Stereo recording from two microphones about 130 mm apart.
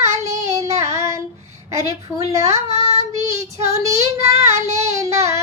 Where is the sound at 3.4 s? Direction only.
25° right (ahead or behind).